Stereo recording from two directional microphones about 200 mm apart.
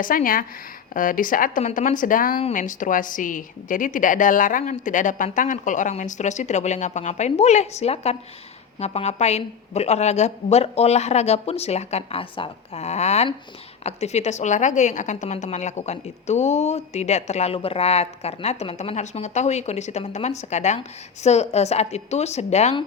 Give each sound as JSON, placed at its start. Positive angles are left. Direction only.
{"t": 0.0, "sound": "a woman's voice", "side_deg": 45}